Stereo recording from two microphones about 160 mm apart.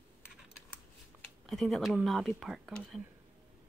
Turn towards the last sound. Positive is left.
turn(degrees=0)  # may be behind; listen again after turning